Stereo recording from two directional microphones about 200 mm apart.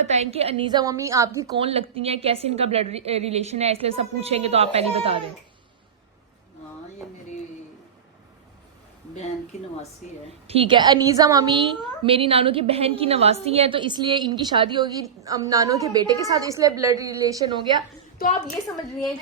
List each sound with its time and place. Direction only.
0.0 s a woman's voice: 35° right (ahead or behind); by 1.5 s 15° right (ahead or behind)
1.5 s a woman's voice: 30° right (ahead or behind)
10.4 s a woman's voice: 30° right (ahead or behind)
18.2 s a woman's voice: 35° left (ahead or behind)